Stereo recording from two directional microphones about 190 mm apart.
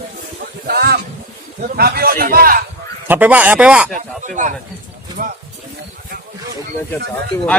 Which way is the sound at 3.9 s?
40° right (ahead or behind).